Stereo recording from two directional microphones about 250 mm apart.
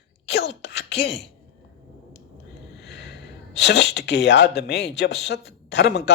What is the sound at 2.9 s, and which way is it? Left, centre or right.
A man's voice, left.